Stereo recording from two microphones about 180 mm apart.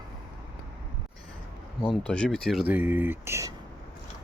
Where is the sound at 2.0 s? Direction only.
5° left (ahead or behind); by 3.5 s 15° right (ahead or behind).